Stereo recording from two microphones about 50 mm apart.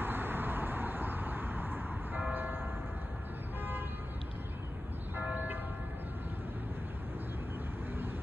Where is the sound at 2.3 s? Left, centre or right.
Right.